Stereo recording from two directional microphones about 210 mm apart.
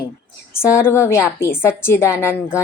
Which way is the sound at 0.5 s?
10° left (ahead or behind).